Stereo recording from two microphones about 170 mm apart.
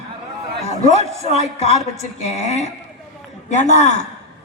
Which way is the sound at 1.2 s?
40° left (ahead or behind).